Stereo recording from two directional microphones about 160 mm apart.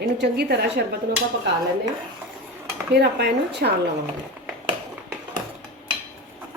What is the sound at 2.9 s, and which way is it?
Speech, 90° right.